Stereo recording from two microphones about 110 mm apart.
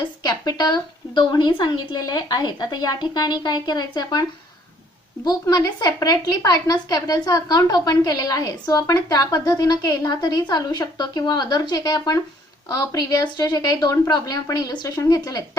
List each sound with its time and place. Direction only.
0.0 s a woman's voice: 40° left (ahead or behind)